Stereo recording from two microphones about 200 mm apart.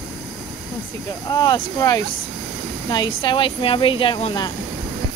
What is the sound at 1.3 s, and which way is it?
Speech, 20° left (ahead or behind).